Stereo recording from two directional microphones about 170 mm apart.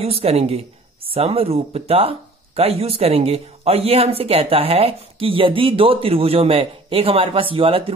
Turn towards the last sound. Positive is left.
turn(degrees=-30)  # may be behind; listen again after turning